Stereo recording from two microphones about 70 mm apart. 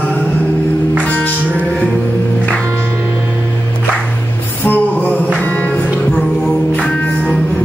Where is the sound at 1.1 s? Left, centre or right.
Left.